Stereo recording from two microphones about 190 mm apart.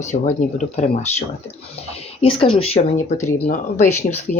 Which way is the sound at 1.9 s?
30° left (ahead or behind).